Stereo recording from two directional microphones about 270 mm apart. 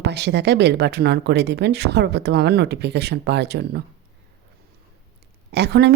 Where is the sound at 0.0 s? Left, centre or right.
Right.